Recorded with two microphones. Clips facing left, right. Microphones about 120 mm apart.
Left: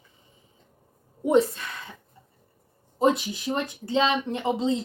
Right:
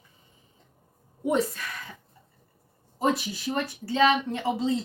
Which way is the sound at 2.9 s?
20° left (ahead or behind).